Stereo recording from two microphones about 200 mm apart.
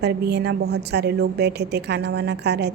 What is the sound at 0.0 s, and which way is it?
A woman's voice, 55° right (ahead or behind).